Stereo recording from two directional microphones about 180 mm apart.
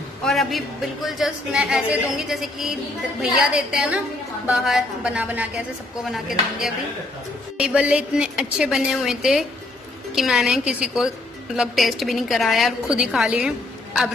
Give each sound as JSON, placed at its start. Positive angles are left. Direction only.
{"t": 0.2, "sound": "speech", "side_deg": 0}